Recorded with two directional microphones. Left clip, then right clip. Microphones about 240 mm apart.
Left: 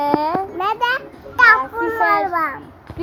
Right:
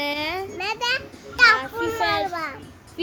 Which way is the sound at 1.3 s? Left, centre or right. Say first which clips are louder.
Left 4 dB; centre.